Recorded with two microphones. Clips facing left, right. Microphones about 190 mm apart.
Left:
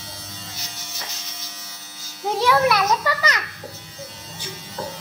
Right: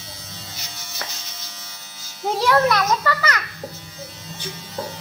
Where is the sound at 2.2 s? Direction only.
Centre (ahead or behind).